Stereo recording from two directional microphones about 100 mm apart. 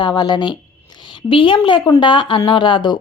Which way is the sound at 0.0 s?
50° left (ahead or behind).